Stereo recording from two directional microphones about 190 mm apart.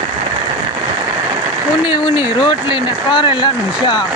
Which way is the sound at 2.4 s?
25° left (ahead or behind).